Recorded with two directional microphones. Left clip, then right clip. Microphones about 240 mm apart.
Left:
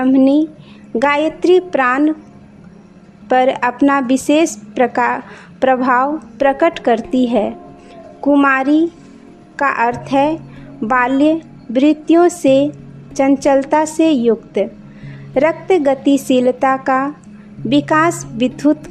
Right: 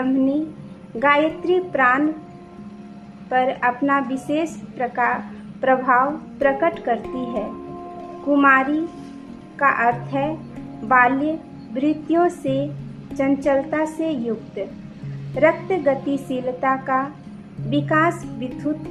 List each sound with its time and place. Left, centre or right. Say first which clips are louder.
0.0 s a woman's voice: left 9 dB; left
3.2 s a woman's voice: left 6 dB; left